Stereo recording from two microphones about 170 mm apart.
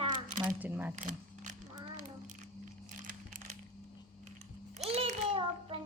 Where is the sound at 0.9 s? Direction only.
50° right (ahead or behind).